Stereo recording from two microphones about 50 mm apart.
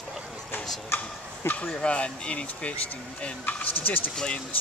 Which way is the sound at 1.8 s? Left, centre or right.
Left.